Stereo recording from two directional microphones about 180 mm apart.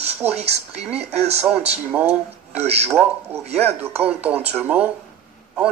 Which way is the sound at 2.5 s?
35° right (ahead or behind).